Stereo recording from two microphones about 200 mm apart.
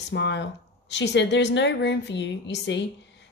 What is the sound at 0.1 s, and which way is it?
Speech, 65° left (ahead or behind).